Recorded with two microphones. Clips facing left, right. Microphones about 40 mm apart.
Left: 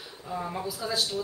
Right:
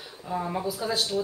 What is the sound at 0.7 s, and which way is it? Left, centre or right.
Speech, right.